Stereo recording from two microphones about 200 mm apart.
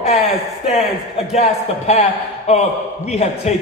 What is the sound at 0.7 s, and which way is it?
A man's voice, 30° left (ahead or behind).